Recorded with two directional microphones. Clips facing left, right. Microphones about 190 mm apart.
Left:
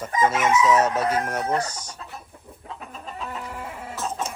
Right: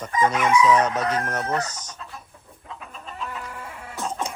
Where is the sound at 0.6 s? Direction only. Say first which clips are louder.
Even; 5° left (ahead or behind).